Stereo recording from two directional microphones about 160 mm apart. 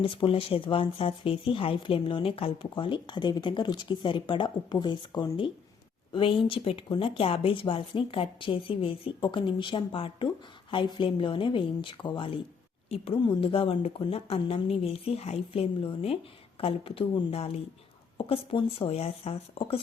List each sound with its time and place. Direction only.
0.0 s speech: 35° left (ahead or behind)